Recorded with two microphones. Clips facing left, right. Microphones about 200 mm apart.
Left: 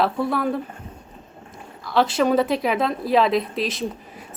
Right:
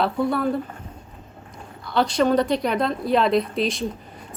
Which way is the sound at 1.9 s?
5° left (ahead or behind).